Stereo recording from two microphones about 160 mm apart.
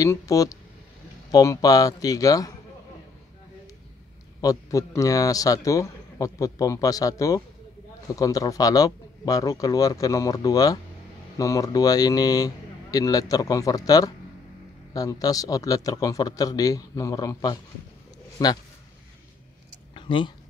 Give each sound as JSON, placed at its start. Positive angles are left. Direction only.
{"t": 0.0, "sound": "a man's voice", "side_deg": 20}
{"t": 4.4, "sound": "a man's voice", "side_deg": 20}
{"t": 19.9, "sound": "a sound", "side_deg": 30}